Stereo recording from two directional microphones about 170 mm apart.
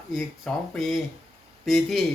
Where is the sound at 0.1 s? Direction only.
Centre (ahead or behind).